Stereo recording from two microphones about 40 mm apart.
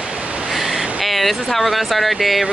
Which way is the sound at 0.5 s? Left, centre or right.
Centre.